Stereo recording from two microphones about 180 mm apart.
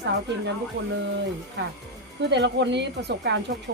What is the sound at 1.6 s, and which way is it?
Speech, 70° right (ahead or behind).